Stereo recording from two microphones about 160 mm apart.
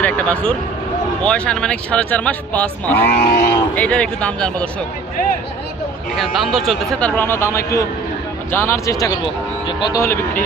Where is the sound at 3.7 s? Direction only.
10° left (ahead or behind).